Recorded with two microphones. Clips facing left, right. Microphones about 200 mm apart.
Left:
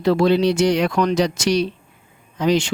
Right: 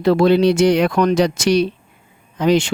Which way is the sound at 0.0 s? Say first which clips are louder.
Right 3 dB; 60° right (ahead or behind).